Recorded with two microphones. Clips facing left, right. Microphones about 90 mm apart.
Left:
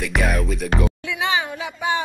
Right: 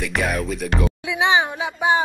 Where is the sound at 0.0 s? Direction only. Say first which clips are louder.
Even; centre (ahead or behind).